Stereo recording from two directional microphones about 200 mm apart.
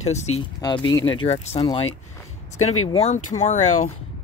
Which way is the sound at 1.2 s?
30° left (ahead or behind).